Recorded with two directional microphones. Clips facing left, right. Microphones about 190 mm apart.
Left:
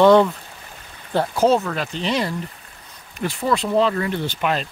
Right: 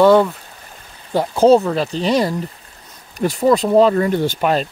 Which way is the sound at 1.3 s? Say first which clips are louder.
Right 7 dB; 30° right (ahead or behind).